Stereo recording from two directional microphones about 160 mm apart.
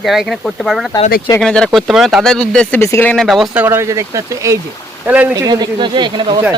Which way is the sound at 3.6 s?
15° right (ahead or behind).